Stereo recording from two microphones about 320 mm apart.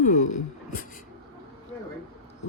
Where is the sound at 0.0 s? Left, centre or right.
Left.